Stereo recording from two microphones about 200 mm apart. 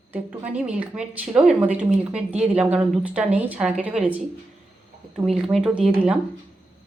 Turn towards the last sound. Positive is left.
turn(degrees=-5)  # may be behind; listen again after turning